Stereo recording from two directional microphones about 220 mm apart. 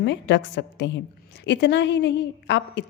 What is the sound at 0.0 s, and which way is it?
A woman's voice, 55° left (ahead or behind).